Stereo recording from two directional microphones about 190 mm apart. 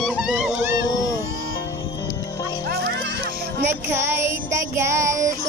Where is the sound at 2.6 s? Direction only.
55° right (ahead or behind).